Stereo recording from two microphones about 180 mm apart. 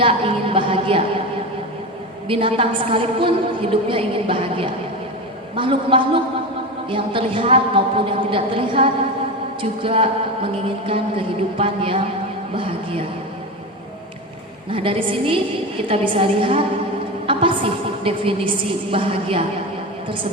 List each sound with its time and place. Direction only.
0.0 s a woman's voice: 30° right (ahead or behind)
2.2 s a woman's voice: 30° right (ahead or behind)
14.7 s a woman's voice: 30° right (ahead or behind)